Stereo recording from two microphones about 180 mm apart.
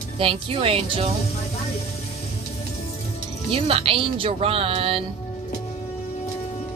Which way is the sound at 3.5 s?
30° right (ahead or behind).